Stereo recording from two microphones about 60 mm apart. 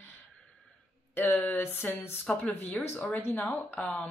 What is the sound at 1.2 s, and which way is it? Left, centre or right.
A woman's voice, left.